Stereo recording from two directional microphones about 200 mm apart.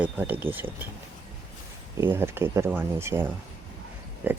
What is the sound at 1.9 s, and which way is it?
Speech, 10° right (ahead or behind).